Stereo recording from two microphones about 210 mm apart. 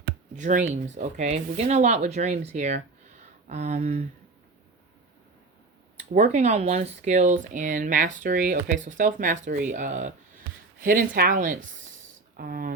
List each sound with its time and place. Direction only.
0.0 s speech: 35° right (ahead or behind)
6.1 s speech: 35° right (ahead or behind)